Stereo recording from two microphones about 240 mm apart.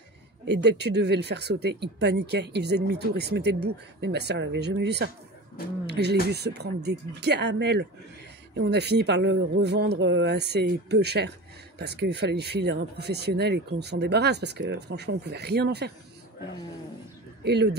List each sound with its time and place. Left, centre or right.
0.5 s speech: right